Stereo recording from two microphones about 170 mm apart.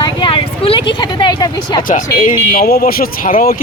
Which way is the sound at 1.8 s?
50° left (ahead or behind).